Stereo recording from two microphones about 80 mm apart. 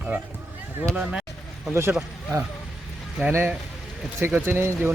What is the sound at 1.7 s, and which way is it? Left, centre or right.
Speech, right.